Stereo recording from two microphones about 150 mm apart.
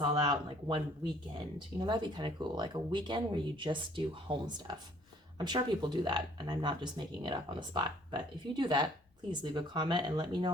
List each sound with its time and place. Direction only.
0.0 s speech: 30° right (ahead or behind)